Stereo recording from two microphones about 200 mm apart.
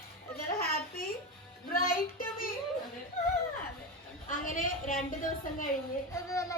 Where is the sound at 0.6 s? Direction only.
50° left (ahead or behind).